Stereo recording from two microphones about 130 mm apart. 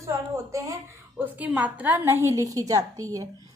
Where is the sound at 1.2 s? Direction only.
10° right (ahead or behind).